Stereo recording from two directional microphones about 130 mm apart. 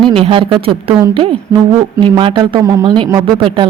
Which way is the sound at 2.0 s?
40° right (ahead or behind).